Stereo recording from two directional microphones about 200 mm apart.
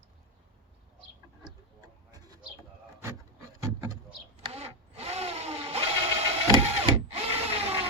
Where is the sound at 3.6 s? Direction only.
15° right (ahead or behind).